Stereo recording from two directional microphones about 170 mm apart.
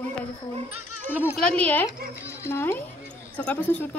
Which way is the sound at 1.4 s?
10° left (ahead or behind).